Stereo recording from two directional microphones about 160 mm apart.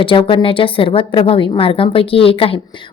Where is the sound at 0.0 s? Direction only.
35° left (ahead or behind).